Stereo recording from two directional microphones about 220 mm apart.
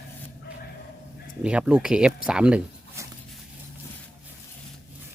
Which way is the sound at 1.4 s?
5° right (ahead or behind).